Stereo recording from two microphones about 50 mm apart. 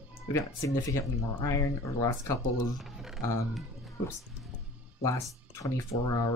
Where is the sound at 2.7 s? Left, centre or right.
Centre.